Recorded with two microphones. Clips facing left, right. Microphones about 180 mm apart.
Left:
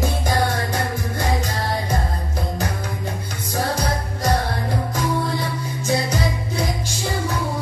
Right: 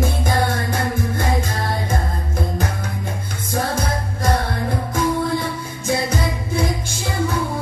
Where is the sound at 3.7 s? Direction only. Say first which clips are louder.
Even; 50° right (ahead or behind).